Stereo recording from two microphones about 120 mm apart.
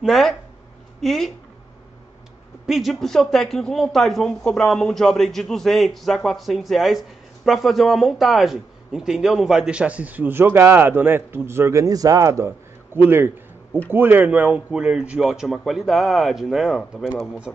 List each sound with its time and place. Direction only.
0.0 s speech: centre (ahead or behind)
2.6 s a man's voice: centre (ahead or behind)